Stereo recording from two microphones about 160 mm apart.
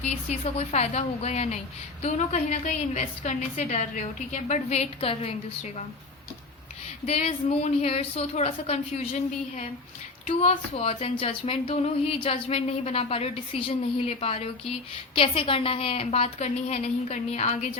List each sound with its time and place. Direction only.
0.3 s a woman's voice: 40° left (ahead or behind)
7.0 s speech: 40° left (ahead or behind)
10.8 s speech: 40° left (ahead or behind)